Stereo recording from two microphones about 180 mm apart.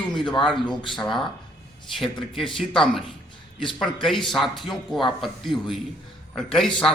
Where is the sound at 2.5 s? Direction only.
Centre (ahead or behind).